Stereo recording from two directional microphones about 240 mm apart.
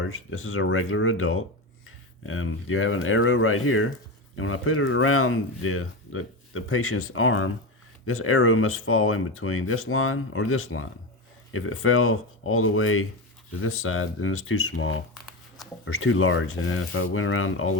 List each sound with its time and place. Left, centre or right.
0.0 s speech: left